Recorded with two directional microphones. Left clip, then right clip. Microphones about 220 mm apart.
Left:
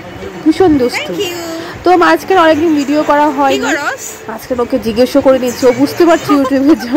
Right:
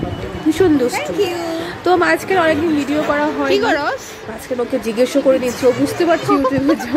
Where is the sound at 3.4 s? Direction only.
Centre (ahead or behind).